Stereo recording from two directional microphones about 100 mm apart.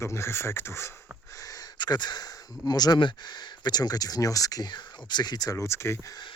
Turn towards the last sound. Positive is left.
turn(degrees=30)  # may be behind; listen again after turning